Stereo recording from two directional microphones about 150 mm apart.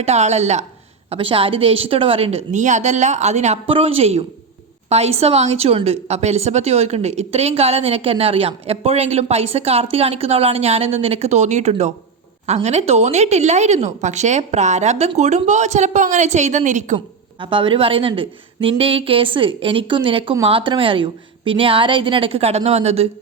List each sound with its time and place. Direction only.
0.0 s a woman's voice: 45° right (ahead or behind)
1.1 s a woman's voice: 35° right (ahead or behind); by 17.0 s 50° right (ahead or behind)
17.4 s a woman's voice: 35° right (ahead or behind)